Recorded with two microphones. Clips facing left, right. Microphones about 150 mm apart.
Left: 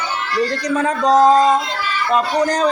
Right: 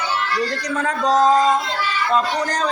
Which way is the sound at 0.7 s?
15° left (ahead or behind).